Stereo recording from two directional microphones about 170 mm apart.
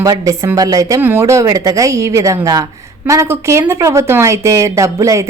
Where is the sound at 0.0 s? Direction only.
20° right (ahead or behind).